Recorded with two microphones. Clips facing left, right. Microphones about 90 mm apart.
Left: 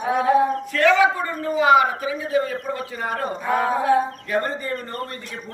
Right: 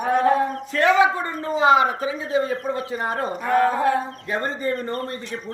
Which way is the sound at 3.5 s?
5° left (ahead or behind).